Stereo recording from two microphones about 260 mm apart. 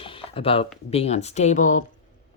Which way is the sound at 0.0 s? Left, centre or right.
Centre.